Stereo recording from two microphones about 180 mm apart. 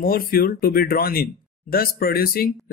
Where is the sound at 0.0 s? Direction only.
55° left (ahead or behind).